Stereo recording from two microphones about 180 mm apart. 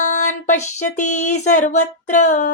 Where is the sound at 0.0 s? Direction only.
45° left (ahead or behind).